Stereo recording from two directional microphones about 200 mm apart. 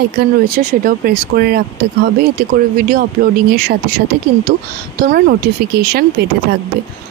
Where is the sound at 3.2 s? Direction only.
40° right (ahead or behind).